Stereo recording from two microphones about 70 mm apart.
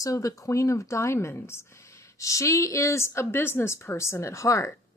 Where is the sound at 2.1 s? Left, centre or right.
Left.